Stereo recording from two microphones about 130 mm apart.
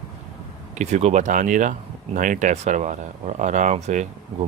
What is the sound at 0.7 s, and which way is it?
Speech, 60° right (ahead or behind).